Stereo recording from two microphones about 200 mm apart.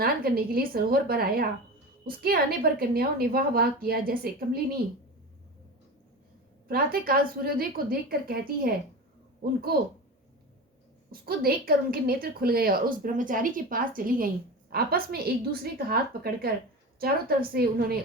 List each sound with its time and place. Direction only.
0.0 s a woman's voice: 50° right (ahead or behind)
6.7 s a woman's voice: 45° right (ahead or behind)
11.1 s a woman's voice: 50° right (ahead or behind)